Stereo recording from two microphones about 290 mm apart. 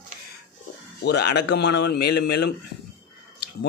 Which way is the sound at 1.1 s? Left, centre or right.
Left.